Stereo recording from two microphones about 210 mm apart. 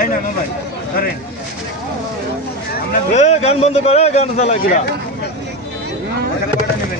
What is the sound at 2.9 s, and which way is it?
A man's voice, 30° left (ahead or behind).